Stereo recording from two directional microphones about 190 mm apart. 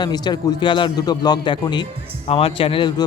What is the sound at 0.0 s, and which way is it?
A man's voice, 25° left (ahead or behind).